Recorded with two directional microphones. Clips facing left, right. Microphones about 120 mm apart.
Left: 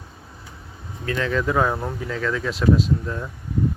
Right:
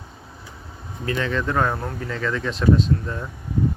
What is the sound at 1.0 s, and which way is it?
Speech, centre (ahead or behind).